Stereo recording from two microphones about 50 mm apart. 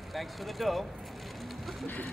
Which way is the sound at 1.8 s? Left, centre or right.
Left.